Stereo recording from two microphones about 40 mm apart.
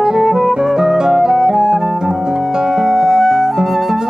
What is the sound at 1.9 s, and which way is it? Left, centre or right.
Music, centre.